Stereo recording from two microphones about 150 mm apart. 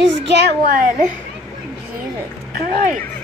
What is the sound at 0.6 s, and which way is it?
Speech, 70° right (ahead or behind).